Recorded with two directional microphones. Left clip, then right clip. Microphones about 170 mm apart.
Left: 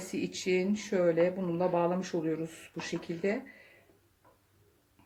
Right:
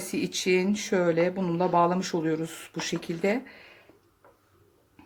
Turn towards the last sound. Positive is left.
turn(degrees=-35)  # may be behind; listen again after turning